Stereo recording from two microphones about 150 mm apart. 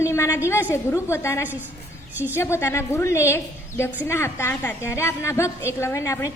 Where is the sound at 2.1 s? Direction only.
10° right (ahead or behind).